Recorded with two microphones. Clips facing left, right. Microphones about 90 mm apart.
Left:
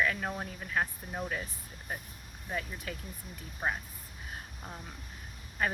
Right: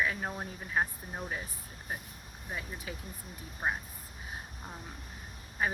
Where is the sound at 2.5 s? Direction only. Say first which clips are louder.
Left 3 dB; 15° right (ahead or behind).